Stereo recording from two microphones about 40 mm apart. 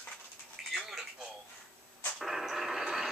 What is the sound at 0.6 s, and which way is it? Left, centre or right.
Telephone, centre.